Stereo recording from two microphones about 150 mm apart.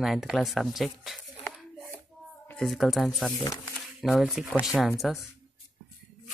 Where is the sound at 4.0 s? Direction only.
Centre (ahead or behind).